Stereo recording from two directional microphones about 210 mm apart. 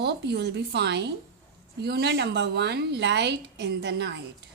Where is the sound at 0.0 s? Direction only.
55° right (ahead or behind).